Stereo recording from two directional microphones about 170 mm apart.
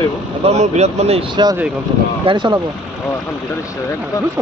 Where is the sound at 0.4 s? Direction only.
40° right (ahead or behind).